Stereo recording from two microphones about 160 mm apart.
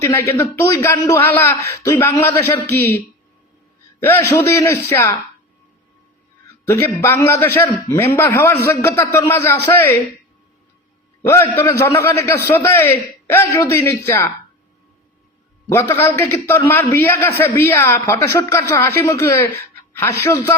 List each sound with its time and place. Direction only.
0.0 s a man's voice: 15° left (ahead or behind)
4.0 s a man's voice: 15° left (ahead or behind)
6.7 s a man's voice: 15° left (ahead or behind)
11.3 s a man's voice: 15° left (ahead or behind)
15.7 s a man's voice: 15° left (ahead or behind)
19.9 s a sound: 15° left (ahead or behind)
20.2 s a man's voice: 15° left (ahead or behind)